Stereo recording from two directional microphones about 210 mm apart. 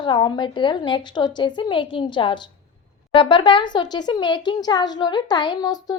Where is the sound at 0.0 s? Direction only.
20° left (ahead or behind).